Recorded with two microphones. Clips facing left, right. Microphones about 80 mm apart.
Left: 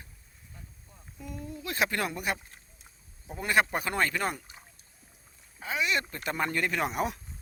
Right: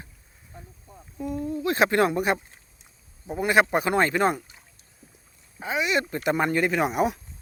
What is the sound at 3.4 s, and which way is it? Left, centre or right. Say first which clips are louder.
Speech: right 6 dB; centre.